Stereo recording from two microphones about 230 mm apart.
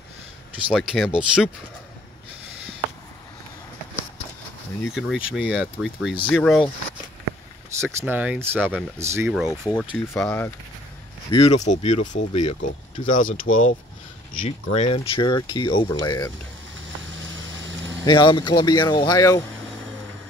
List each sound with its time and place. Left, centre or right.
0.7 s speech: centre
4.8 s speech: centre
7.8 s speech: centre
9.5 s speech: centre
11.3 s speech: left
18.0 s speech: centre